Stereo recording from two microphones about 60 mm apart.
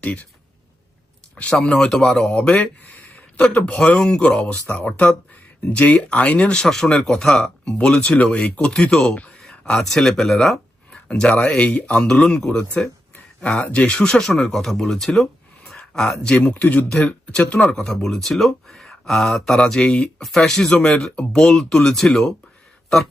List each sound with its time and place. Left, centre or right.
0.0 s speech: left
1.5 s speech: centre
8.6 s speech: centre
10.9 s speech: centre